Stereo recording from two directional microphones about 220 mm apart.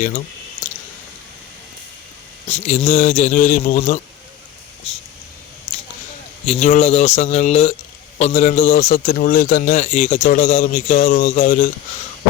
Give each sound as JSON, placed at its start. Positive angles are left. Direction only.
{"t": 2.5, "sound": "a man's voice", "side_deg": 30}
{"t": 6.4, "sound": "a man's voice", "side_deg": 30}